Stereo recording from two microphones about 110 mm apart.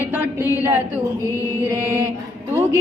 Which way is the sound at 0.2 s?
20° right (ahead or behind).